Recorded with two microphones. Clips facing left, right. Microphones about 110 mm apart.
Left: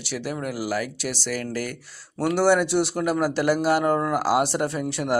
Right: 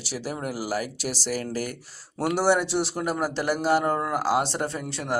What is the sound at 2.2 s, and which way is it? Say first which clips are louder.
A man's voice: left 3 dB; 5° right (ahead or behind).